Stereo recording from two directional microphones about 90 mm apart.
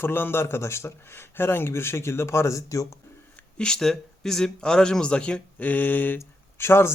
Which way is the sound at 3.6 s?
5° left (ahead or behind).